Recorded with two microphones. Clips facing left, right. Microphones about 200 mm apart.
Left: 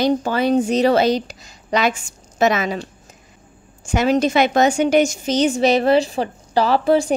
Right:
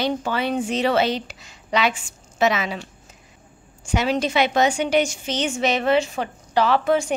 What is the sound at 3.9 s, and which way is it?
A woman's voice, 45° left (ahead or behind).